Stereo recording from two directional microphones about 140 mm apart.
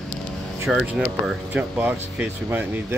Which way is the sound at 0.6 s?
5° right (ahead or behind).